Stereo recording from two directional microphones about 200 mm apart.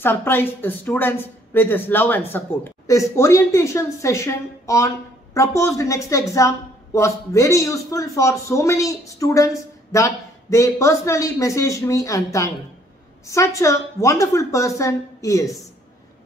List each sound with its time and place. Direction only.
0.0 s a woman's voice: 10° left (ahead or behind)